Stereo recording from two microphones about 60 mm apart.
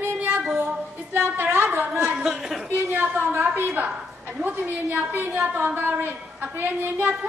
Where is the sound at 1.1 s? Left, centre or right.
Right.